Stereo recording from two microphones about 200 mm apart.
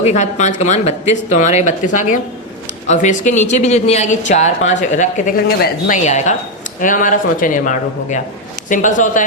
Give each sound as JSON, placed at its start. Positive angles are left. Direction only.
{"t": 0.0, "sound": "speech", "side_deg": 35}